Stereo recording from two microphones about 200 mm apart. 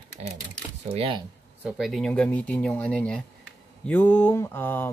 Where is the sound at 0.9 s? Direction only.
25° right (ahead or behind).